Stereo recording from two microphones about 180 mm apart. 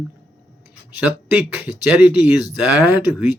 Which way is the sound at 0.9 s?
10° right (ahead or behind).